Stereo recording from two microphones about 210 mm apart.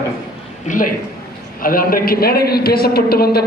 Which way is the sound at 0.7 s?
40° left (ahead or behind).